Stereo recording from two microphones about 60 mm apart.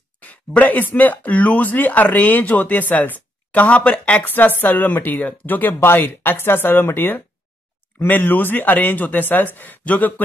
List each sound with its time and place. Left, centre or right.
0.2 s speech: left
4.3 s speech: left